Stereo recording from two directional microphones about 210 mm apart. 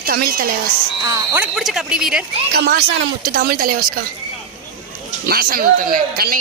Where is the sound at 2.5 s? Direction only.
45° right (ahead or behind).